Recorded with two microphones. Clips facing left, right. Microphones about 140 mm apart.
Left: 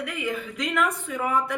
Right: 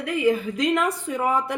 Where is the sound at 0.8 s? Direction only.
40° right (ahead or behind).